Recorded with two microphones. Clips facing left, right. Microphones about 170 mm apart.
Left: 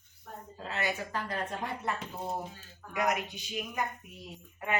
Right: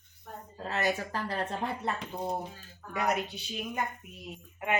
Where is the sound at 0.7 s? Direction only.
40° right (ahead or behind).